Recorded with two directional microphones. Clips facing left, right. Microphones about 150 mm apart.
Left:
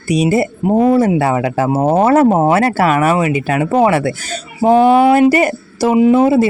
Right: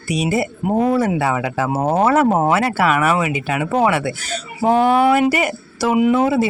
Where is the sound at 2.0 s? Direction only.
35° left (ahead or behind).